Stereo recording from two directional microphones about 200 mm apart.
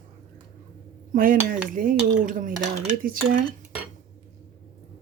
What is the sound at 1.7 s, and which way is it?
Speech, 40° right (ahead or behind).